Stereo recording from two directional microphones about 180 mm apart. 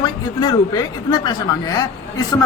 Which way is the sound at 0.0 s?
20° left (ahead or behind).